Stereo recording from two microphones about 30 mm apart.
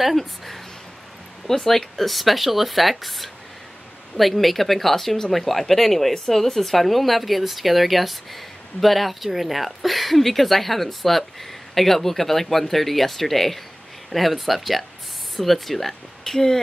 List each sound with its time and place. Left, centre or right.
1.6 s speech: centre